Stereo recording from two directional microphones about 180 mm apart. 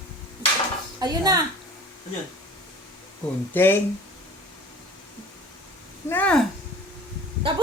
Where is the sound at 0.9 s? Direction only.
20° right (ahead or behind).